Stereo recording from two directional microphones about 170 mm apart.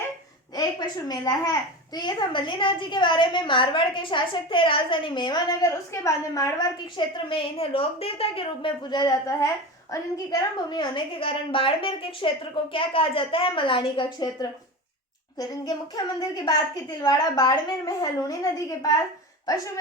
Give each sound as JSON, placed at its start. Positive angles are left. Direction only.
{"t": 0.5, "sound": "a woman's voice", "side_deg": 25}
{"t": 16.3, "sound": "a woman's voice", "side_deg": 20}